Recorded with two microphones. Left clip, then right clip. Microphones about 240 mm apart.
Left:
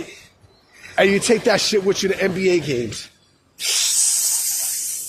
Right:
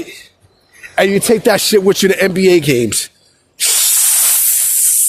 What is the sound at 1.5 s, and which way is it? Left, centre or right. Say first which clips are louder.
Speech: right 7 dB; right.